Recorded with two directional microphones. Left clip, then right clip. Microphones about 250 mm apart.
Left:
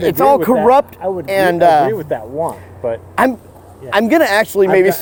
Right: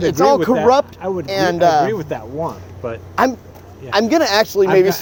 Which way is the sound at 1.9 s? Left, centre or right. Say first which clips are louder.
Left 3 dB; centre.